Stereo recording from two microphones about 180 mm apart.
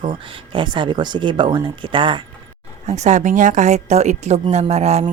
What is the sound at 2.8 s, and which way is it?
A woman's voice, 40° right (ahead or behind).